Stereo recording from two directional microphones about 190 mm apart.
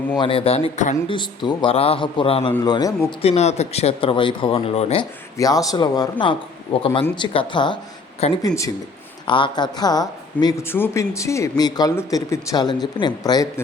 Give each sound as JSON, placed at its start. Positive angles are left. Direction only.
{"t": 0.2, "sound": "a woman's voice", "side_deg": 30}
{"t": 1.0, "sound": "a woman's voice", "side_deg": 25}
{"t": 3.2, "sound": "speech", "side_deg": 35}
{"t": 5.4, "sound": "a woman's voice", "side_deg": 20}